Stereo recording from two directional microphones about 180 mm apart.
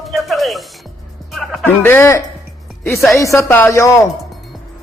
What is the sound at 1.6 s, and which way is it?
Speech, 10° left (ahead or behind).